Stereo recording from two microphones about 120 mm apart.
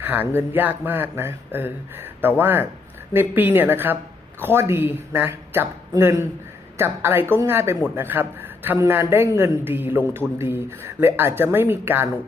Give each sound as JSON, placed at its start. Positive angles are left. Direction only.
{"t": 0.0, "sound": "a man's voice", "side_deg": -15}